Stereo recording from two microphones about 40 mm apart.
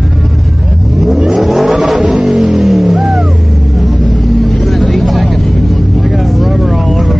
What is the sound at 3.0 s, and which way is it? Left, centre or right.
Vehicle, centre.